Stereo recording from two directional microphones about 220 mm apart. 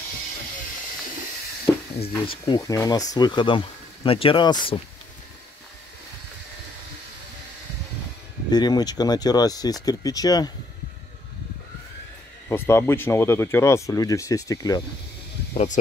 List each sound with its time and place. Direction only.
2.4 s speech: 20° left (ahead or behind)
8.5 s speech: 20° left (ahead or behind)
12.4 s speech: 10° left (ahead or behind)
15.5 s speech: 30° left (ahead or behind)